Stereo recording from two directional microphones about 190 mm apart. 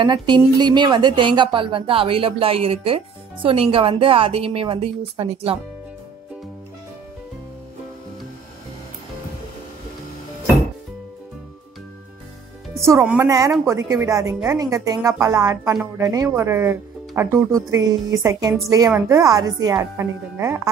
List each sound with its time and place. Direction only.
0.0 s a woman's voice: 25° right (ahead or behind)
12.7 s a woman's voice: 15° right (ahead or behind)